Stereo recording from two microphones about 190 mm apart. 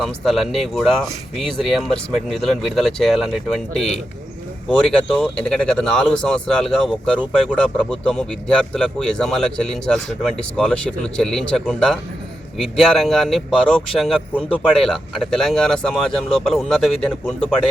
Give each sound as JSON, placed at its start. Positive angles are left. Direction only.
{"t": 0.0, "sound": "speech", "side_deg": 0}